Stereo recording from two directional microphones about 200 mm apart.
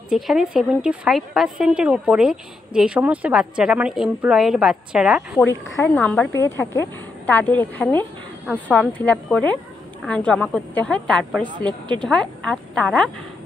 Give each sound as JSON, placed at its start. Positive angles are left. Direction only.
{"t": 0.1, "sound": "a woman's voice", "side_deg": -5}
{"t": 5.5, "sound": "a woman's voice", "side_deg": 10}